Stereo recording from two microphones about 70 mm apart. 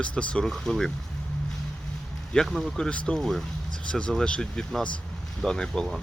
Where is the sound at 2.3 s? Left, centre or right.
Centre.